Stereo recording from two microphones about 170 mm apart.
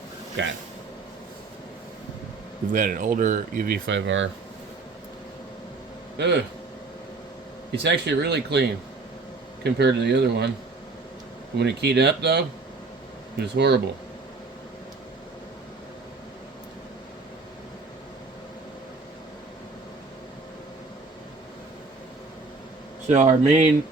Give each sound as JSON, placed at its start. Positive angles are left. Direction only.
{"t": 0.4, "sound": "speech", "side_deg": -90}
{"t": 2.7, "sound": "speech", "side_deg": -50}
{"t": 3.8, "sound": "speech", "side_deg": -90}
{"t": 6.1, "sound": "speech", "side_deg": -85}
{"t": 7.8, "sound": "speech", "side_deg": -85}
{"t": 9.6, "sound": "speech", "side_deg": -75}
{"t": 11.5, "sound": "speech", "side_deg": -75}
{"t": 23.0, "sound": "speech", "side_deg": -45}